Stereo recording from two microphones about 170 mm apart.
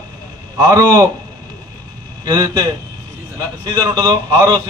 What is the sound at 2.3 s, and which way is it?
Speech, 20° right (ahead or behind).